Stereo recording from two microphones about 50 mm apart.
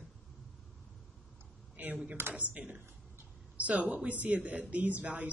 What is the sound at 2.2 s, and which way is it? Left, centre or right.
Speech, right.